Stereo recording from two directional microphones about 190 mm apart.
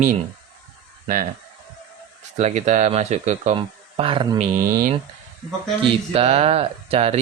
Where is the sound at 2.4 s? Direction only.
40° right (ahead or behind).